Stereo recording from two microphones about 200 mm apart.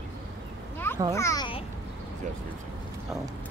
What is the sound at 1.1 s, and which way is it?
Speech, 15° left (ahead or behind).